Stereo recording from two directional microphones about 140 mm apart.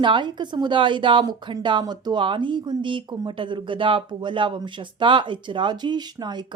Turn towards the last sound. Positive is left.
turn(degrees=-30)  # may be behind; listen again after turning